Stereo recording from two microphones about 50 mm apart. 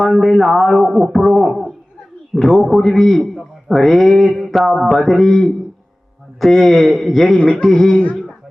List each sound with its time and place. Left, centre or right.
0.0 s a man's voice: centre
7.3 s a sound: left
7.7 s speech: centre